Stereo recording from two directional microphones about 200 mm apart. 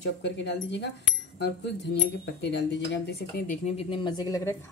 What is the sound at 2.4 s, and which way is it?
Speech, 60° left (ahead or behind).